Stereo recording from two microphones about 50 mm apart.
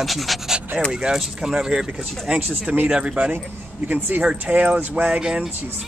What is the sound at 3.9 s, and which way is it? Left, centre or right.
Speech, right.